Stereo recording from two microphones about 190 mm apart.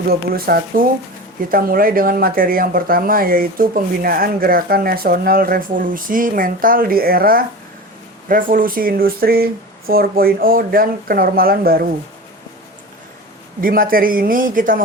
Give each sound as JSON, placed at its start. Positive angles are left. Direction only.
{"t": 0.1, "sound": "speech", "side_deg": -55}
{"t": 13.6, "sound": "speech", "side_deg": -50}